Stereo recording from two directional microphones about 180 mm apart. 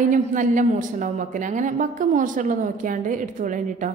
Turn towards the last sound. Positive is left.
turn(degrees=-45)  # may be behind; listen again after turning